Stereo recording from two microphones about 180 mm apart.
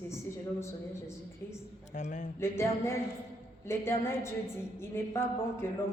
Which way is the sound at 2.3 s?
15° left (ahead or behind).